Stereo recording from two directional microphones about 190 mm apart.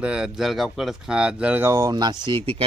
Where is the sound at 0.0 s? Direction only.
5° right (ahead or behind).